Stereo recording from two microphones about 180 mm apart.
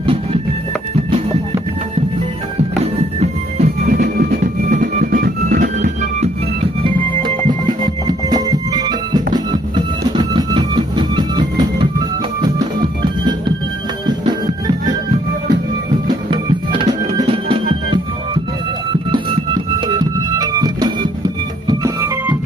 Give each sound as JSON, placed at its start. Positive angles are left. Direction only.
{"t": 0.0, "sound": "music", "side_deg": -30}
{"t": 2.8, "sound": "music", "side_deg": -35}
{"t": 3.8, "sound": "music", "side_deg": -55}
{"t": 6.2, "sound": "music", "side_deg": -30}
{"t": 16.3, "sound": "music", "side_deg": -30}
{"t": 20.0, "sound": "music", "side_deg": -20}
{"t": 21.6, "sound": "organ", "side_deg": -15}